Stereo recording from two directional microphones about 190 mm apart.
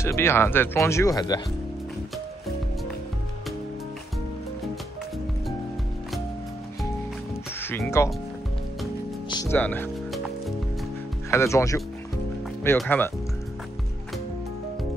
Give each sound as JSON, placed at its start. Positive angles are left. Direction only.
{"t": 0.0, "sound": "speech", "side_deg": 15}
{"t": 8.0, "sound": "speech", "side_deg": 15}
{"t": 9.3, "sound": "music", "side_deg": 20}
{"t": 9.6, "sound": "music", "side_deg": 10}
{"t": 11.2, "sound": "speech", "side_deg": 15}